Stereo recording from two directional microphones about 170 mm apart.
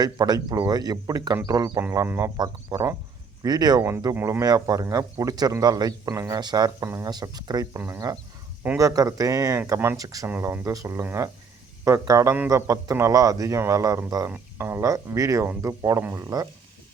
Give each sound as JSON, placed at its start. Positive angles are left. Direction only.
{"t": 0.0, "sound": "a man's voice", "side_deg": -25}